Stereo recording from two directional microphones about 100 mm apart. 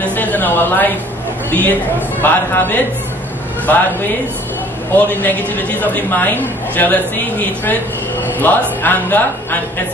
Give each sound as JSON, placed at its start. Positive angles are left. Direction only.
{"t": 0.0, "sound": "a sound", "side_deg": 20}
{"t": 1.5, "sound": "a woman's voice", "side_deg": 15}
{"t": 4.9, "sound": "a woman's voice", "side_deg": 15}